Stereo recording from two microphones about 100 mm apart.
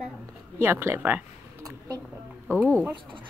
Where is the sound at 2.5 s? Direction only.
25° right (ahead or behind).